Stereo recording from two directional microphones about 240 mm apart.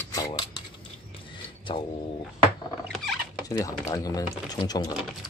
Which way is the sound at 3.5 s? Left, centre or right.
Centre.